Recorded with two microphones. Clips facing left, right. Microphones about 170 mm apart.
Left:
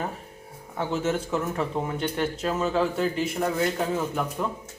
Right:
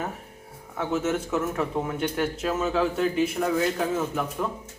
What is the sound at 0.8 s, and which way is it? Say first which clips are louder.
Speech: even; 5° right (ahead or behind).